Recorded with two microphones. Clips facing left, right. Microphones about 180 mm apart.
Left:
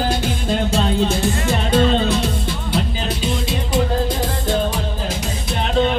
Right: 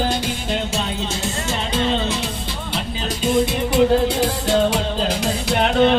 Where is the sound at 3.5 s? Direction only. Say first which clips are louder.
Right 4 dB; 70° right (ahead or behind).